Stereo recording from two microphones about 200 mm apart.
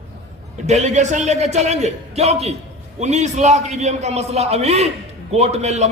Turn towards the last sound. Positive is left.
turn(degrees=-35)  # may be behind; listen again after turning